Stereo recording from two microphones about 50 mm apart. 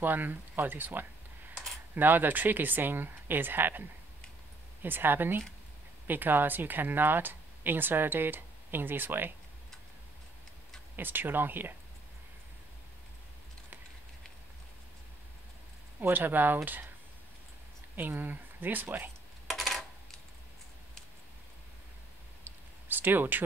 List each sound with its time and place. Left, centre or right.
0.0 s speech: right
4.8 s speech: right
11.0 s speech: right
16.0 s speech: right
17.9 s speech: right
19.5 s coin: centre
22.4 s a sound: right